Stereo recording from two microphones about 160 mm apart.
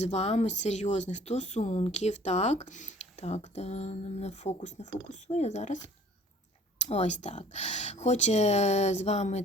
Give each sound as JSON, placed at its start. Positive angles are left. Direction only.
{"t": 0.0, "sound": "speech", "side_deg": 45}